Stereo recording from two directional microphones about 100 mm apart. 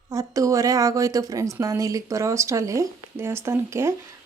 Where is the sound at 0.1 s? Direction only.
35° right (ahead or behind).